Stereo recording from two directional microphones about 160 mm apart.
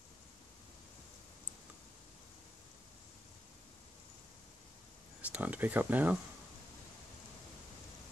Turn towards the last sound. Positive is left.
turn(degrees=-10)  # may be behind; listen again after turning